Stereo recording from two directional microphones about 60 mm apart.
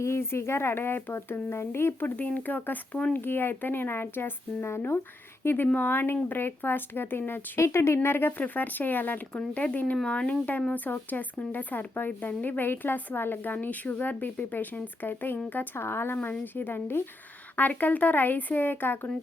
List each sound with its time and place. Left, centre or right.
0.0 s speech: left
2.1 s speech: left
3.2 s speech: left
7.6 s speech: left
8.4 s speech: left
10.8 s speech: left